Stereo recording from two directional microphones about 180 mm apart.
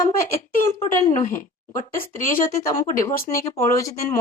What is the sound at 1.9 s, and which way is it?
Speech, 15° left (ahead or behind).